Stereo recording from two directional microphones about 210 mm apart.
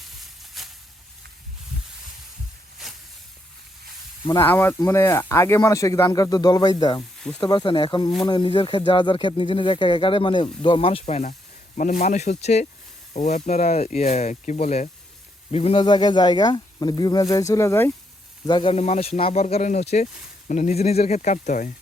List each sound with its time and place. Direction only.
0.2 s a sound: centre (ahead or behind)
4.3 s speech: 10° left (ahead or behind)
7.2 s speech: 5° left (ahead or behind)
7.4 s speech: 20° left (ahead or behind)